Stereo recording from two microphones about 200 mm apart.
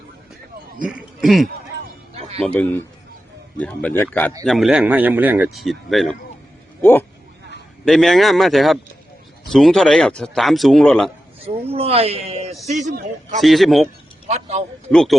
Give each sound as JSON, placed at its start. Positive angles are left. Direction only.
{"t": 0.8, "sound": "speech", "side_deg": -5}
{"t": 7.9, "sound": "speech", "side_deg": 0}
{"t": 11.7, "sound": "speech", "side_deg": -30}
{"t": 13.4, "sound": "speech", "side_deg": 0}
{"t": 14.3, "sound": "speech", "side_deg": -35}
{"t": 14.9, "sound": "speech", "side_deg": 0}